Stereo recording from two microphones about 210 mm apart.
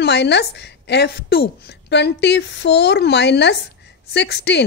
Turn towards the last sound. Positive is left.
turn(degrees=55)  # may be behind; listen again after turning